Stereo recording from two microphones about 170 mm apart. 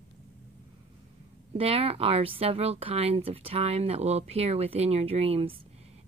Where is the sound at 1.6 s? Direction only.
35° right (ahead or behind).